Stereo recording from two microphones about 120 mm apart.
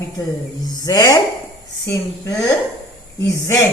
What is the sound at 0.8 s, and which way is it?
A woman's voice, 30° left (ahead or behind).